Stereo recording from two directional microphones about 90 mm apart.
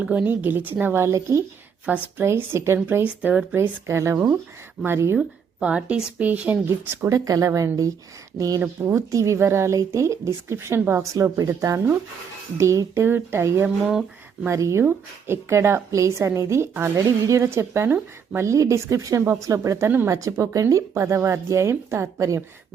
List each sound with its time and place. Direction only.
0.0 s speech: 15° right (ahead or behind)
3.5 s a woman's voice: 30° right (ahead or behind)
5.1 s speech: 10° right (ahead or behind)
6.9 s a woman's voice: 35° right (ahead or behind)
11.1 s a woman's voice: 40° right (ahead or behind)
19.2 s a woman's voice: 25° right (ahead or behind)